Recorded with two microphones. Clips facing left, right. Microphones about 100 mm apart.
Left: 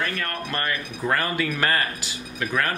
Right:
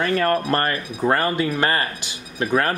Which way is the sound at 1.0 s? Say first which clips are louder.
Right 5 dB; 30° right (ahead or behind).